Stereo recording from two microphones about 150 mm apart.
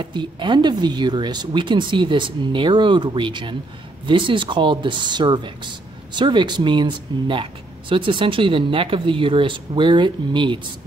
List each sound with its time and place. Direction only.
0.0 s speech: 30° right (ahead or behind)